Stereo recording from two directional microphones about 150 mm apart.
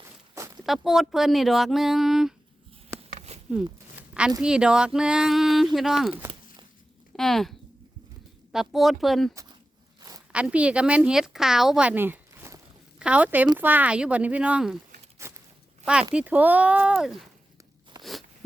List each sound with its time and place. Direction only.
0.0 s walk: 20° right (ahead or behind)
0.6 s speech: centre (ahead or behind)
3.2 s a sound: 45° right (ahead or behind)
3.9 s a sound: 5° right (ahead or behind)
4.4 s speech: 5° right (ahead or behind)
8.5 s speech: centre (ahead or behind)
9.3 s speech: 20° right (ahead or behind)
10.3 s speech: 10° right (ahead or behind)
16.1 s speech: 10° right (ahead or behind)
18.0 s biting: centre (ahead or behind)